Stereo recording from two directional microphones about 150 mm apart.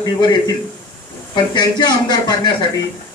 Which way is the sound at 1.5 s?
30° left (ahead or behind).